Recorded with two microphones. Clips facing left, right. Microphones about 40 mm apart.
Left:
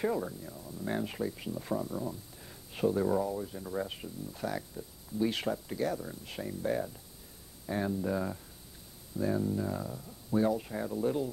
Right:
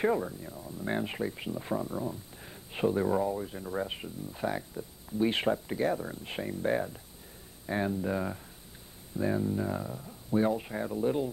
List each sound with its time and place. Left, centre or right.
0.6 s speech: right
3.9 s speech: right